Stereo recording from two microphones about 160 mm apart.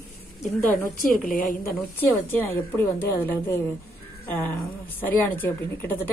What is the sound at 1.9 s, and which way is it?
A woman's voice, 10° left (ahead or behind).